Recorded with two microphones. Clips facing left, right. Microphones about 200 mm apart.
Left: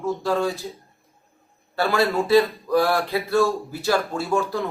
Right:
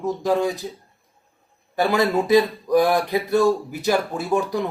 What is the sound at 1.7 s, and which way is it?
Speech, 15° right (ahead or behind).